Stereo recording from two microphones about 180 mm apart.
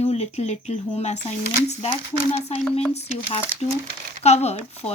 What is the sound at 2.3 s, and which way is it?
Speech, 35° left (ahead or behind).